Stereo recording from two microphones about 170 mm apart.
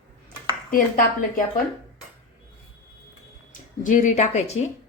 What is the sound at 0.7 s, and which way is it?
Speech, 55° left (ahead or behind).